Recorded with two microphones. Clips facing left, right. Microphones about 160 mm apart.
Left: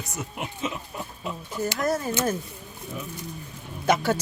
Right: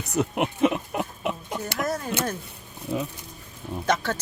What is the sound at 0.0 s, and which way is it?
Speech, 65° right (ahead or behind).